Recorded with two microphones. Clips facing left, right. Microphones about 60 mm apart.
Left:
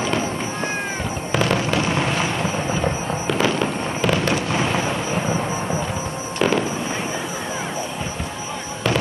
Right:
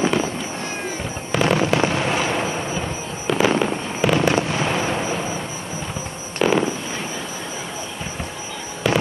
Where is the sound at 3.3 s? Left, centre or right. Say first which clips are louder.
Right 3 dB; centre.